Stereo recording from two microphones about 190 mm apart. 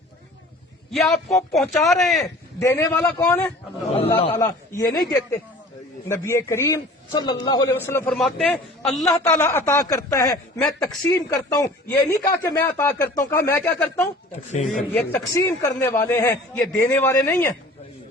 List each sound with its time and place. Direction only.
0.9 s a man's voice: centre (ahead or behind)
2.6 s a man's voice: 15° left (ahead or behind)
8.0 s a man's voice: centre (ahead or behind)
9.3 s speech: 15° left (ahead or behind)